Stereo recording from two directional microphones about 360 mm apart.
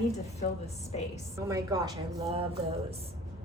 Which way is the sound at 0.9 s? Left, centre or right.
Centre.